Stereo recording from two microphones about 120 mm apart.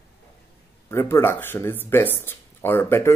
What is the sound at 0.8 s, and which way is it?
Speech, 20° left (ahead or behind).